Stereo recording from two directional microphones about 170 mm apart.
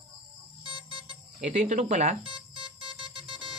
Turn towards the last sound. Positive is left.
turn(degrees=-30)  # may be behind; listen again after turning